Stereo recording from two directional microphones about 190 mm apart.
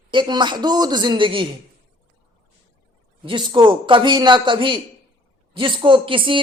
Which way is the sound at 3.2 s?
25° right (ahead or behind).